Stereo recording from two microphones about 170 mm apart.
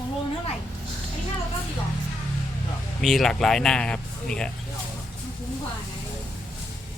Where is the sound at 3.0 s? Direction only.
Centre (ahead or behind).